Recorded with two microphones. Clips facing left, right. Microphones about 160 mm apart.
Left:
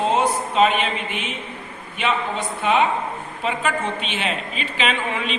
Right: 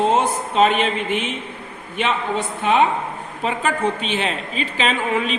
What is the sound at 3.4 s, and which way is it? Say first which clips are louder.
A woman's voice: right 3 dB; 40° right (ahead or behind).